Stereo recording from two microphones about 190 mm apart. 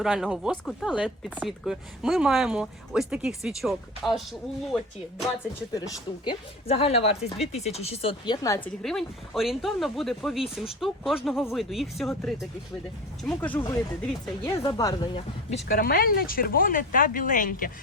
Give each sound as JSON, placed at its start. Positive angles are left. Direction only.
{"t": 0.0, "sound": "speech", "side_deg": -5}
{"t": 5.7, "sound": "speech", "side_deg": 20}
{"t": 6.7, "sound": "speech", "side_deg": 30}
{"t": 8.8, "sound": "speech", "side_deg": 0}
{"t": 14.4, "sound": "speech", "side_deg": 20}
{"t": 15.7, "sound": "speech", "side_deg": 50}